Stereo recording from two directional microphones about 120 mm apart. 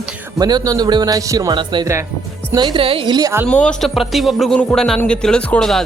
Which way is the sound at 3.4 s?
10° left (ahead or behind).